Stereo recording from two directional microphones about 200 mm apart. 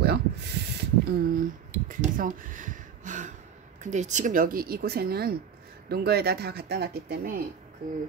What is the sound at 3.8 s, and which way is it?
Speech, 35° right (ahead or behind).